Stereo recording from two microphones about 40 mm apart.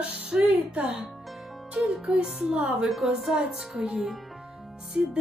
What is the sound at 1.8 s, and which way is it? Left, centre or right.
Music, right.